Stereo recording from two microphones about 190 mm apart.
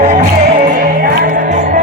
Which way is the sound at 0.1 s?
45° right (ahead or behind).